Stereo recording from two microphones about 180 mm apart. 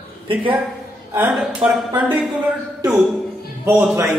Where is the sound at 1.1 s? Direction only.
10° right (ahead or behind).